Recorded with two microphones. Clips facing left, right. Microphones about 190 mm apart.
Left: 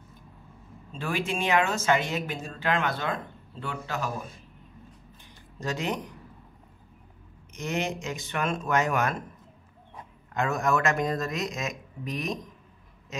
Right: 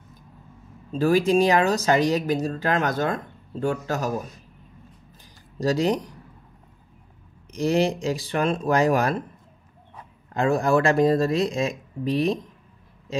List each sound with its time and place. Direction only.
0.9 s speech: 40° right (ahead or behind)
5.6 s speech: 35° right (ahead or behind)
7.5 s speech: 35° right (ahead or behind)
10.3 s speech: 30° right (ahead or behind)